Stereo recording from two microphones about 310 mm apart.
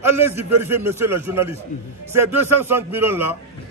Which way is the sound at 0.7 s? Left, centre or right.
Centre.